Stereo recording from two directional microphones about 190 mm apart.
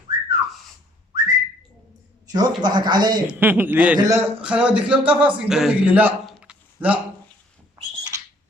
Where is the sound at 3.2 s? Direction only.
10° right (ahead or behind).